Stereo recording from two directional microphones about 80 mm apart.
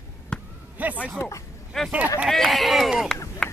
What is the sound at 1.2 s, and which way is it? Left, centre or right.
Speech, left.